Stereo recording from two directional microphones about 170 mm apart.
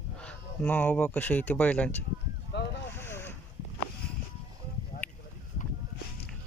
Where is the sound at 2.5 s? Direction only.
90° left.